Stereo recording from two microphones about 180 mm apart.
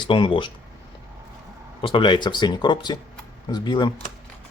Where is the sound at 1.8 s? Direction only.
25° left (ahead or behind).